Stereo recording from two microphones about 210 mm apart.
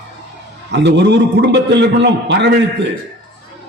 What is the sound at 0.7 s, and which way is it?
A man's voice, 55° right (ahead or behind).